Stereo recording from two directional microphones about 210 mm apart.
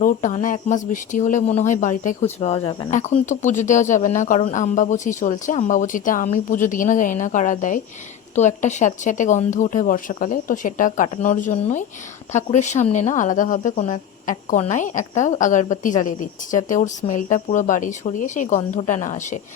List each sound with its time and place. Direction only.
0.0 s speech: 35° left (ahead or behind)